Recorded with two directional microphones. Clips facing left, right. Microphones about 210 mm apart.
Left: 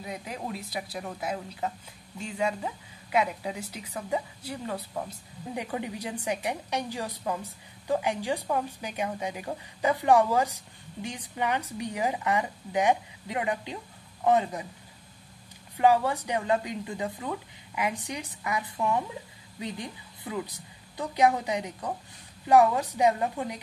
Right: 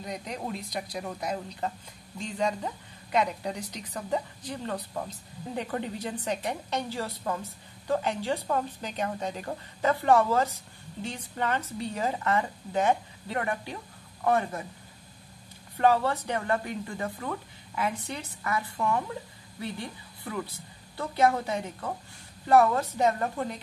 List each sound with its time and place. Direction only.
0.0 s a woman's voice: 5° left (ahead or behind)
15.8 s a woman's voice: 10° left (ahead or behind)